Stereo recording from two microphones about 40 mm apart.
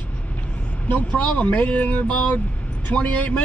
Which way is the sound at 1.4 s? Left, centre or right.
Left.